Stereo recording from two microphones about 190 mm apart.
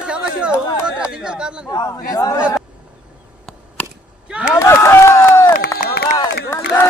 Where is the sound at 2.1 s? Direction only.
20° left (ahead or behind).